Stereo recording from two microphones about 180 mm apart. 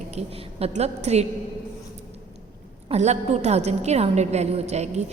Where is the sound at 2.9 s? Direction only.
40° right (ahead or behind).